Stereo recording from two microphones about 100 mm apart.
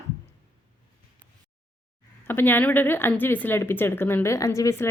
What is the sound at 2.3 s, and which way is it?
Speech, 20° left (ahead or behind).